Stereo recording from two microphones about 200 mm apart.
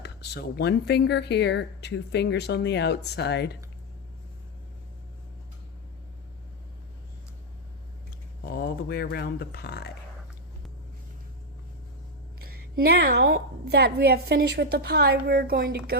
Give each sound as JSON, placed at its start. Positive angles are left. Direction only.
{"t": 0.0, "sound": "speech", "side_deg": 55}
{"t": 8.4, "sound": "speech", "side_deg": 45}
{"t": 12.7, "sound": "a woman's voice", "side_deg": -55}